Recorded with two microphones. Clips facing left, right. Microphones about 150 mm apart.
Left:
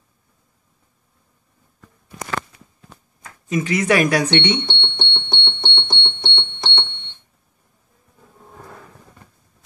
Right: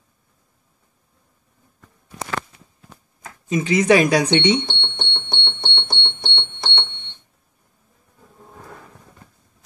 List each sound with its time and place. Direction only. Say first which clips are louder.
3.4 s doorbell: right 3 dB; 25° right (ahead or behind); by 6.9 s 5° right (ahead or behind)